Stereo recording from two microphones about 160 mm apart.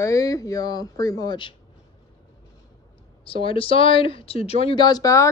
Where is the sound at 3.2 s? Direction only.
35° left (ahead or behind).